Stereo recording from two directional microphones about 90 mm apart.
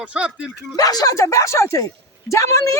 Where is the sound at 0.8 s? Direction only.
45° left (ahead or behind).